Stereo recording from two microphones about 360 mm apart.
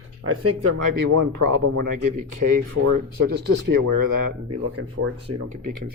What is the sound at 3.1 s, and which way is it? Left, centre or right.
Speech, right.